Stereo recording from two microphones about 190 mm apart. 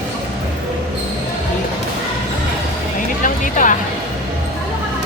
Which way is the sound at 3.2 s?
45° left (ahead or behind).